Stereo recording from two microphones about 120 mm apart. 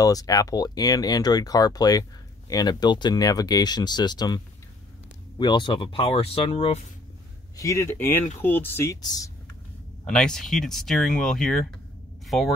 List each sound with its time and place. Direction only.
0.0 s speech: 30° left (ahead or behind)
5.4 s speech: 40° left (ahead or behind)
7.5 s speech: 25° left (ahead or behind)
9.0 s speech: 35° left (ahead or behind)
10.0 s speech: 5° left (ahead or behind)